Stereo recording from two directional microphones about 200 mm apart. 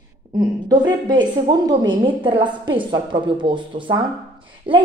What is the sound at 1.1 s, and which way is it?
A woman's voice, 20° right (ahead or behind).